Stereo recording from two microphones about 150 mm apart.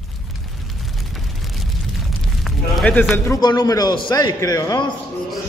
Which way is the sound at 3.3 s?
30° left (ahead or behind).